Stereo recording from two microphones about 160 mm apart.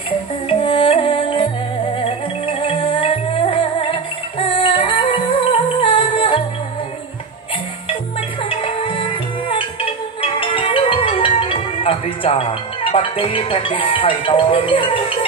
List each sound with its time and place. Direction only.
0.5 s music: 35° left (ahead or behind)
7.9 s music: 35° left (ahead or behind)